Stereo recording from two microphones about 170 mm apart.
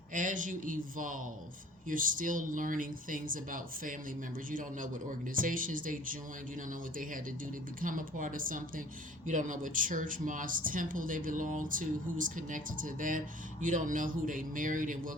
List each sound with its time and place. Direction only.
0.1 s speech: 50° right (ahead or behind)